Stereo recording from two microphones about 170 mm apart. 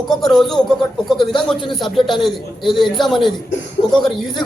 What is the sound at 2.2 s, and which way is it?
A man's voice, centre (ahead or behind).